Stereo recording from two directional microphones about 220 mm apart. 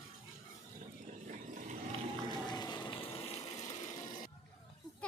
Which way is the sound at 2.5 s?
20° left (ahead or behind).